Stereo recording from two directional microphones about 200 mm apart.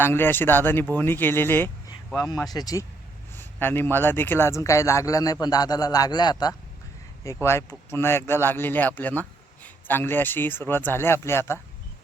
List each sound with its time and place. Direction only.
0.0 s a man's voice: 10° left (ahead or behind)